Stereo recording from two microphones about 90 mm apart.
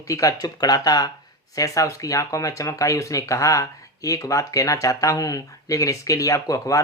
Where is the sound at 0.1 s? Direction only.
40° left (ahead or behind).